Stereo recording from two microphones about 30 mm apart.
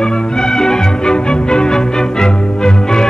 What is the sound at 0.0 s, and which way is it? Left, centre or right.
Music, left.